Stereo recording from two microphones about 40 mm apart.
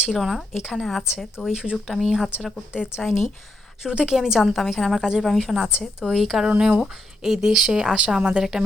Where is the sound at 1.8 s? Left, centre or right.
Centre.